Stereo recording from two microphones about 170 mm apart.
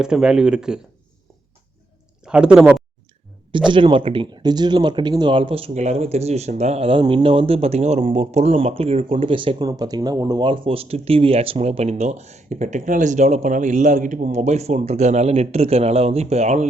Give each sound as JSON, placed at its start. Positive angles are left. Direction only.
{"t": 0.0, "sound": "speech", "side_deg": -5}
{"t": 2.2, "sound": "speech", "side_deg": -5}
{"t": 3.7, "sound": "speech", "side_deg": -30}